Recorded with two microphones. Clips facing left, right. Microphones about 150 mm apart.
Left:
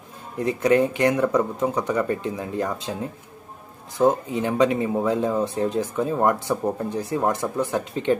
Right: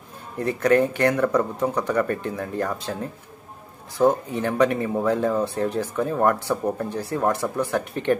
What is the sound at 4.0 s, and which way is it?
Speech, 20° left (ahead or behind).